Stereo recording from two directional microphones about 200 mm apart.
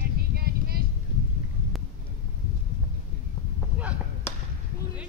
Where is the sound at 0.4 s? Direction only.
50° right (ahead or behind).